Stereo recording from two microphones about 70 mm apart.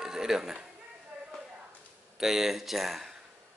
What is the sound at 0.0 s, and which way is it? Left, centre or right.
Speech, centre.